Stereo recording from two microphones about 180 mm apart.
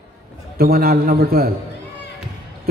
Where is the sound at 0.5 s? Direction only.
55° right (ahead or behind).